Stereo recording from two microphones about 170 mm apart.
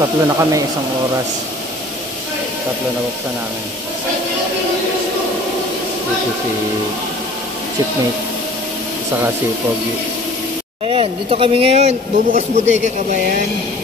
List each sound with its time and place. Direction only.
0.0 s speech: 20° right (ahead or behind)
10.9 s speech: 35° right (ahead or behind)